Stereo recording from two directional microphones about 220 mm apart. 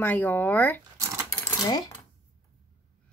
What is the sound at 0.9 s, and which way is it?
Sewing machine, 15° right (ahead or behind).